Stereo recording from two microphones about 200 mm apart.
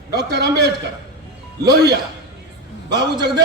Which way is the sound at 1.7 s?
55° right (ahead or behind).